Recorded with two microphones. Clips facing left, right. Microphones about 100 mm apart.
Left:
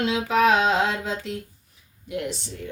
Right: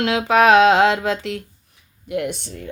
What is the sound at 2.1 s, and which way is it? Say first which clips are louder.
Speech: right 6 dB; 60° right (ahead or behind).